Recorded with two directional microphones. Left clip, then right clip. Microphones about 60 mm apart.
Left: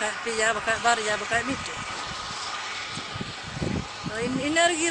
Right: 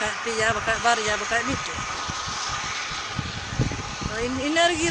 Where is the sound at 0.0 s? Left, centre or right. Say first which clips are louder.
Right 1 dB; centre.